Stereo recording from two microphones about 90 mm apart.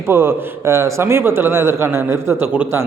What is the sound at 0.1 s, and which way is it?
A man's voice, 25° right (ahead or behind).